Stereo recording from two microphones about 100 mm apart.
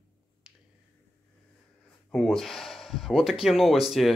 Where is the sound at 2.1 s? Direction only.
5° left (ahead or behind).